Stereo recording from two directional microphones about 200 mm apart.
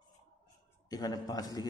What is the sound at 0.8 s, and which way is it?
Speech, 20° left (ahead or behind).